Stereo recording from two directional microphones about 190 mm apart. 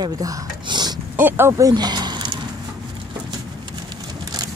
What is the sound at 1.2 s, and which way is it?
Speech, 10° right (ahead or behind).